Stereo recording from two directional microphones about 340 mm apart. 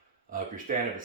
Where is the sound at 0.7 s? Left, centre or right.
Right.